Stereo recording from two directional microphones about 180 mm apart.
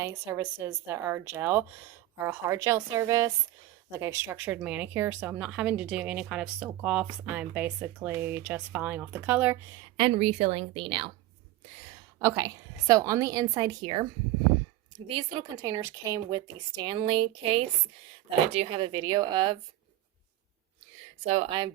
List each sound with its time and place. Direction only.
0.0 s speech: 15° right (ahead or behind)
10.0 s a woman's voice: 35° right (ahead or behind)
12.2 s speech: 15° right (ahead or behind)
21.2 s a woman's voice: 35° right (ahead or behind)